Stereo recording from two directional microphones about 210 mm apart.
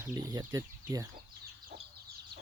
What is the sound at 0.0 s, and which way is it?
Speech, 15° right (ahead or behind).